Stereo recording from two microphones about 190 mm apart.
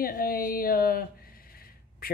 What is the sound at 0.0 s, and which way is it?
Speech, 50° left (ahead or behind).